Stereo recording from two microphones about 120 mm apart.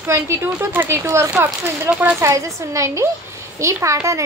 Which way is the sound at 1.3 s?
15° right (ahead or behind).